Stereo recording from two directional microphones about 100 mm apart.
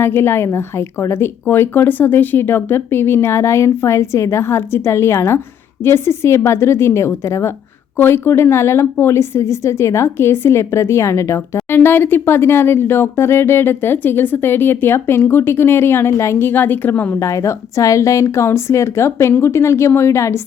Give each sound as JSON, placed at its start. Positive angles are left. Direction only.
{"t": 0.0, "sound": "a woman's voice", "side_deg": 20}
{"t": 17.2, "sound": "a woman's voice", "side_deg": 30}